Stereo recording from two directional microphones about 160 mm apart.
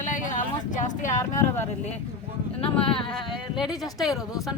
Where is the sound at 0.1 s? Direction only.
50° left (ahead or behind).